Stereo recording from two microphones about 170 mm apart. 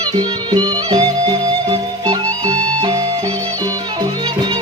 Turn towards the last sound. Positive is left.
turn(degrees=-20)  # may be behind; listen again after turning